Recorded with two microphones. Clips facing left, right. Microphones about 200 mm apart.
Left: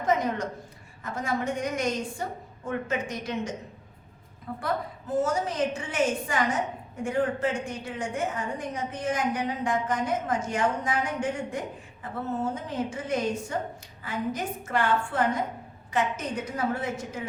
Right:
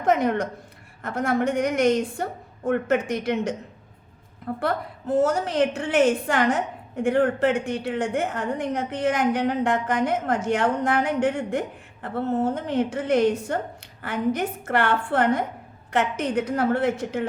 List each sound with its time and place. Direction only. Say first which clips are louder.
0.0 s a woman's voice: right 5 dB; 65° right (ahead or behind)
4.6 s a woman's voice: right 4 dB; 65° right (ahead or behind)